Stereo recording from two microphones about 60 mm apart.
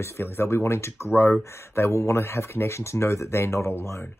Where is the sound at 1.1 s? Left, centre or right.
Left.